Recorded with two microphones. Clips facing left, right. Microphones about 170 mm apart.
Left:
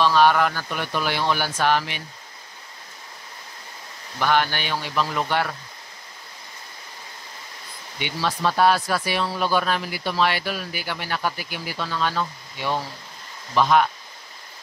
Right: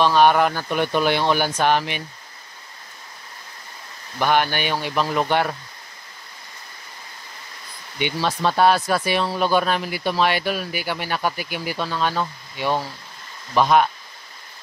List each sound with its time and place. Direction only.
0.0 s speech: 15° right (ahead or behind)
4.2 s speech: 15° right (ahead or behind)
8.0 s speech: 20° right (ahead or behind)